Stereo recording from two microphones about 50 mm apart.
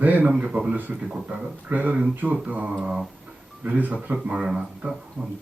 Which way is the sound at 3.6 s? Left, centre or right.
Right.